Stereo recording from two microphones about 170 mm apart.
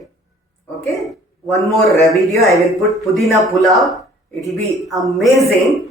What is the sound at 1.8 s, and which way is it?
Speech, centre (ahead or behind).